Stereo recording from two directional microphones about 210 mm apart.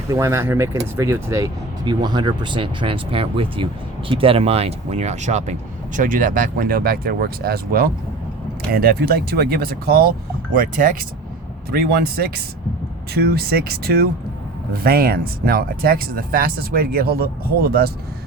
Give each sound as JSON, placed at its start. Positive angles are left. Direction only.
{"t": 0.1, "sound": "speech", "side_deg": -15}